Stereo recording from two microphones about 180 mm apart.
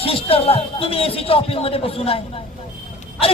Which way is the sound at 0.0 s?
30° left (ahead or behind).